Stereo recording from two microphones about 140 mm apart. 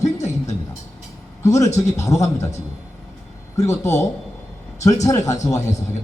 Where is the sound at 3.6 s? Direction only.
20° left (ahead or behind).